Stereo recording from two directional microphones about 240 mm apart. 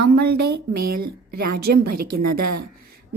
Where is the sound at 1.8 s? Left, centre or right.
Right.